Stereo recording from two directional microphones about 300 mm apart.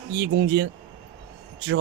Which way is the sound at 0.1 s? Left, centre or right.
Right.